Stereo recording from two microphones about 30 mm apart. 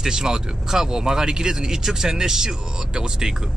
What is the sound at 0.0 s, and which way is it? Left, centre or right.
Speech, right.